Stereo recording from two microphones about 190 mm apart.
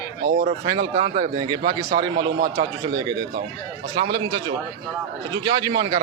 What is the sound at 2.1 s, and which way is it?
Speech, 45° right (ahead or behind).